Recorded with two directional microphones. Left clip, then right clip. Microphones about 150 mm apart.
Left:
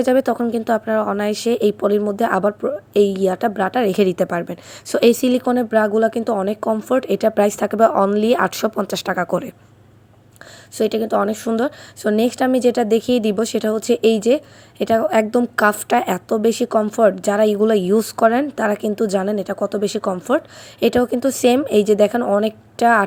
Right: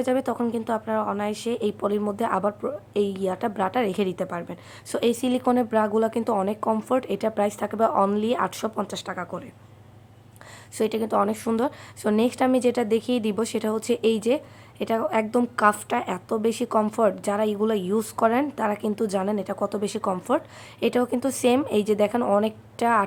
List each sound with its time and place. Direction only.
0.0 s a woman's voice: 30° left (ahead or behind); by 9.5 s 45° left (ahead or behind)
10.8 s a woman's voice: 20° left (ahead or behind)